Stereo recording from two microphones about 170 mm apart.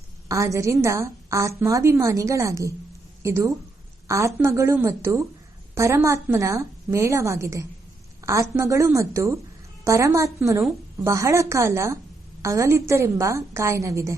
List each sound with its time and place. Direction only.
0.3 s a woman's voice: 20° right (ahead or behind)